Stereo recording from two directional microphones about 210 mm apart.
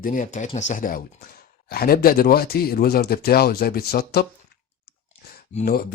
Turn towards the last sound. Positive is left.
turn(degrees=45)  # may be behind; listen again after turning